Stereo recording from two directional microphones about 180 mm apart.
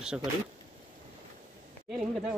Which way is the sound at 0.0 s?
5° right (ahead or behind).